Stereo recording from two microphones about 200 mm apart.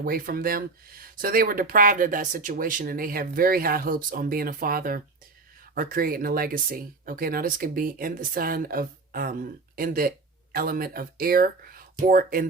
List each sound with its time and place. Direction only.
0.0 s speech: 45° right (ahead or behind)